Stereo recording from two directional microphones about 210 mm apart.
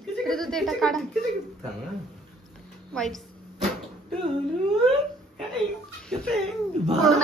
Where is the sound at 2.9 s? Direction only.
Centre (ahead or behind).